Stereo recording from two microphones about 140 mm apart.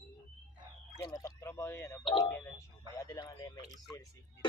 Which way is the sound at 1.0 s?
25° left (ahead or behind).